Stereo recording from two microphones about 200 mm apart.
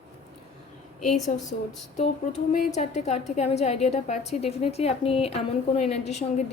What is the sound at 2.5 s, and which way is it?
A woman's voice, 40° left (ahead or behind).